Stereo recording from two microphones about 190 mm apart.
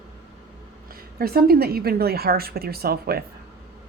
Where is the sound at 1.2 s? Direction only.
55° right (ahead or behind).